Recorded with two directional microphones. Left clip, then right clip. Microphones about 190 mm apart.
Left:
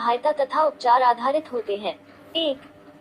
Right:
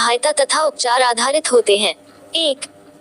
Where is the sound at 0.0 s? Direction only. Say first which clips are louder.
Right 6 dB; 60° right (ahead or behind).